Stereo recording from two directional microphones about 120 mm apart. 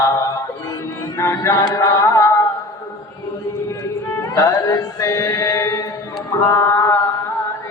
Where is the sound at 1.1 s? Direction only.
25° left (ahead or behind).